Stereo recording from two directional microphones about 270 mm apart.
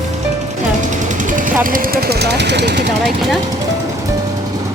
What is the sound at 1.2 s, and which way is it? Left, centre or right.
Speech, right.